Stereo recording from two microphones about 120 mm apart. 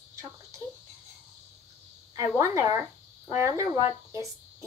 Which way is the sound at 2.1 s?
25° right (ahead or behind).